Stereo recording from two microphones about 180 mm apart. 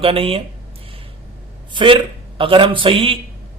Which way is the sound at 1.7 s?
30° right (ahead or behind).